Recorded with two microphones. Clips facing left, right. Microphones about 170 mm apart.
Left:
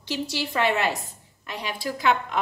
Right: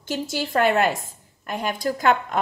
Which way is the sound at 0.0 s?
50° right (ahead or behind).